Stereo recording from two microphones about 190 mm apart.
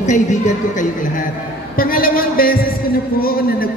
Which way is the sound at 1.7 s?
50° left (ahead or behind).